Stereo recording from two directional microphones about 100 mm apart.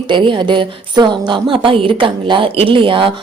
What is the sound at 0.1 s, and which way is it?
A woman's voice, 55° right (ahead or behind).